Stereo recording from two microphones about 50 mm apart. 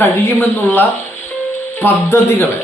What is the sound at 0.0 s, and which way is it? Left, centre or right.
Speech, left.